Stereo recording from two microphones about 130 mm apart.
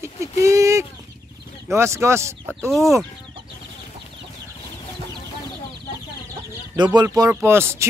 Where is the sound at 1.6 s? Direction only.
20° right (ahead or behind).